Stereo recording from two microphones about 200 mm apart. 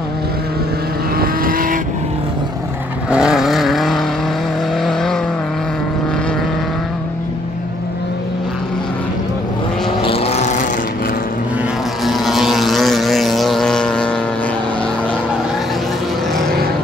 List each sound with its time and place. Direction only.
1.1 s vehicle: 45° right (ahead or behind)
3.1 s vehicle: 5° right (ahead or behind)
10.0 s vehicle: 30° left (ahead or behind)
12.0 s vehicle: centre (ahead or behind)